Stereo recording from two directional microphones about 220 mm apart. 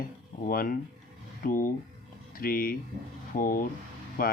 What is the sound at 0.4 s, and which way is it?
Speech, 40° left (ahead or behind).